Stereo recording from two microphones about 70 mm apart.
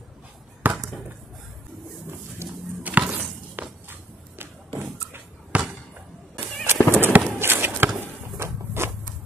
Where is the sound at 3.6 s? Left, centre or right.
Right.